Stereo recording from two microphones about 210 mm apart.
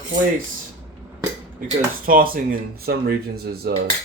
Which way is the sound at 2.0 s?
45° right (ahead or behind).